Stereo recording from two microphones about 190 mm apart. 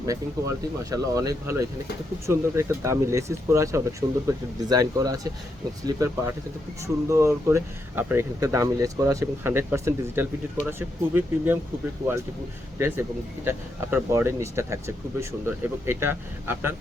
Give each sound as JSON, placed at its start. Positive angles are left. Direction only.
{"t": 0.0, "sound": "speech", "side_deg": -15}
{"t": 12.8, "sound": "speech", "side_deg": -15}